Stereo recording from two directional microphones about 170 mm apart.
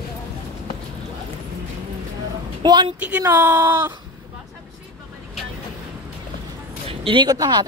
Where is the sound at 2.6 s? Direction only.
25° right (ahead or behind).